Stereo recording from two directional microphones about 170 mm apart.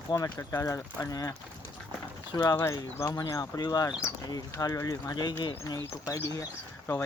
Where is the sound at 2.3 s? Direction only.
25° left (ahead or behind).